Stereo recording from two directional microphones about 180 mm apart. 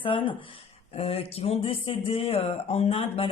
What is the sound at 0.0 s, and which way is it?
Speech, 30° left (ahead or behind).